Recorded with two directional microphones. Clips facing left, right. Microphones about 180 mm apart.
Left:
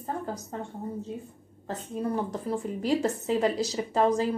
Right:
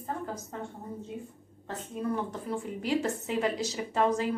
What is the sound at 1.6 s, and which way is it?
A woman's voice, 35° left (ahead or behind).